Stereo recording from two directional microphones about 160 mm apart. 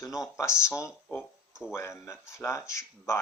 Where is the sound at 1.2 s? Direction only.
5° right (ahead or behind).